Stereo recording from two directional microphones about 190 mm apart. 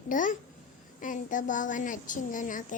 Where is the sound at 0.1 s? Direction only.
45° left (ahead or behind).